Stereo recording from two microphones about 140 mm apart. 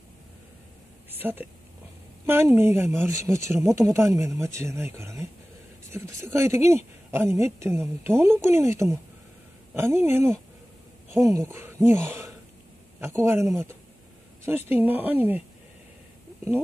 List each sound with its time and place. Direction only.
1.1 s speech: 15° right (ahead or behind)